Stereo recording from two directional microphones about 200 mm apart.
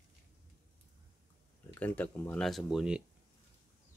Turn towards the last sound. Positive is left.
turn(degrees=-5)  # may be behind; listen again after turning